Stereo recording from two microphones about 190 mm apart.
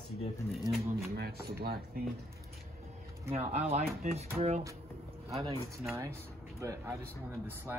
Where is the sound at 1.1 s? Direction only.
55° right (ahead or behind).